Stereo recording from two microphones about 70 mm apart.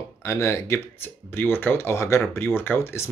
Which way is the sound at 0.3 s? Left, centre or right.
Left.